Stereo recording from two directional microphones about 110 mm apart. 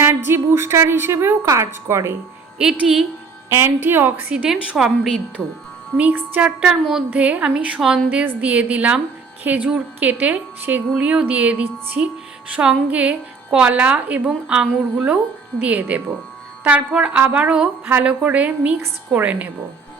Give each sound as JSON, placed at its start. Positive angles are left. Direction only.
{"t": 0.0, "sound": "a woman's voice", "side_deg": -20}
{"t": 2.6, "sound": "speech", "side_deg": -10}
{"t": 3.5, "sound": "a woman's voice", "side_deg": -20}
{"t": 6.0, "sound": "a woman's voice", "side_deg": -15}
{"t": 6.7, "sound": "a woman's voice", "side_deg": -5}
{"t": 8.2, "sound": "a woman's voice", "side_deg": -15}